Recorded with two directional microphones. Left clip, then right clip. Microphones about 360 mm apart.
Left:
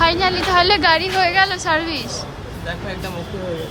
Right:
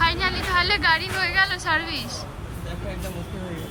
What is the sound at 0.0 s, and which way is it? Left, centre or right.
A woman's voice, centre.